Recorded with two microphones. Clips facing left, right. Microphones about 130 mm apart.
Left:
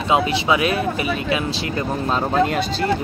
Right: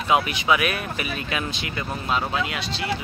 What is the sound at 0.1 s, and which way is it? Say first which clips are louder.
Speech: left 3 dB; 25° left (ahead or behind).